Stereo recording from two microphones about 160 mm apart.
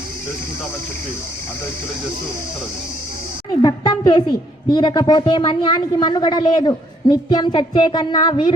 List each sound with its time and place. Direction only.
3.6 s speech: 25° left (ahead or behind)